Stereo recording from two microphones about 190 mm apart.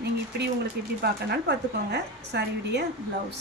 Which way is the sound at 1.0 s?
55° right (ahead or behind).